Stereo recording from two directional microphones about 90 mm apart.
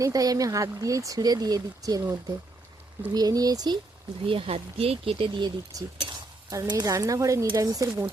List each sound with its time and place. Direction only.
0.0 s speech: 40° right (ahead or behind)
4.3 s speech: 90° right
5.7 s speech: 40° right (ahead or behind)